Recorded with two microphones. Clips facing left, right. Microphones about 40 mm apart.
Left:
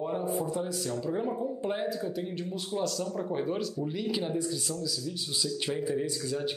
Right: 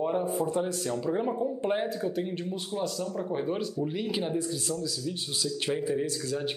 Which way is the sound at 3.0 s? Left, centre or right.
Centre.